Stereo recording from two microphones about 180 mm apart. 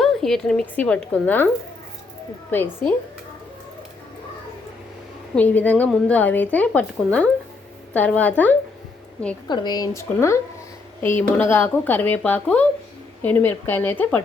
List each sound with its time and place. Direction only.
0.0 s speech: centre (ahead or behind)
5.3 s speech: 10° left (ahead or behind)
9.5 s speech: 20° left (ahead or behind)